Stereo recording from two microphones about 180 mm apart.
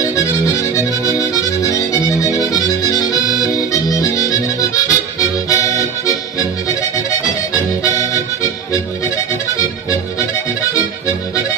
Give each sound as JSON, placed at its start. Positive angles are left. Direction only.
{"t": 0.0, "sound": "accordion", "side_deg": 15}
{"t": 8.0, "sound": "music", "side_deg": 20}
{"t": 10.7, "sound": "music", "side_deg": 20}